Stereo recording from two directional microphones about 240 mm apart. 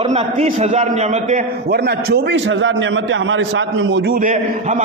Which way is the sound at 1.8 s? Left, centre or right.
Right.